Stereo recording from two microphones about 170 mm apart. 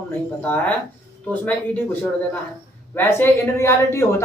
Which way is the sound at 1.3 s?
10° left (ahead or behind).